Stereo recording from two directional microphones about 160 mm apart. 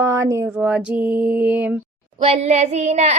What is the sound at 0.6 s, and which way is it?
Mantra, 10° right (ahead or behind).